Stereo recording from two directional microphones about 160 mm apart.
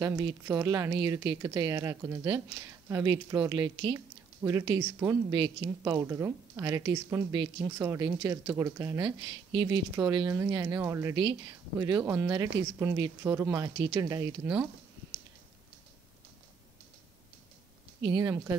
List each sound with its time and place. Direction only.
0.0 s speech: 20° right (ahead or behind)
18.2 s speech: 15° right (ahead or behind)